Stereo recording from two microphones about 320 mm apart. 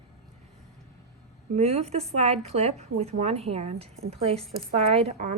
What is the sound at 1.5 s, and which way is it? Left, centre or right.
A woman's voice, centre.